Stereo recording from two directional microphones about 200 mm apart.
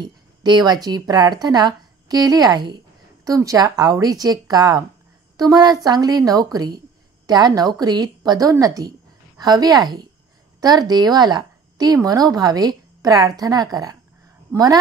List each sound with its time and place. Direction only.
0.0 s a woman's voice: 20° right (ahead or behind)